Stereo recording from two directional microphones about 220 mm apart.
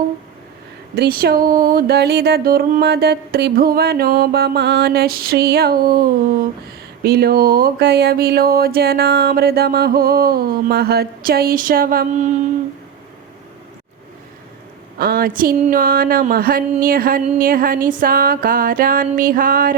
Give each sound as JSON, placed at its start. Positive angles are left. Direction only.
{"t": 0.9, "sound": "speech", "side_deg": -45}
{"t": 14.9, "sound": "music", "side_deg": -45}